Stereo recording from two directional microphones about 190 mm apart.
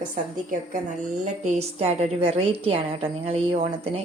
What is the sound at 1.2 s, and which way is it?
A woman's voice, 40° right (ahead or behind).